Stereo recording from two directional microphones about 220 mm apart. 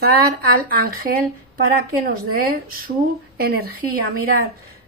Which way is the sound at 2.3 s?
40° right (ahead or behind).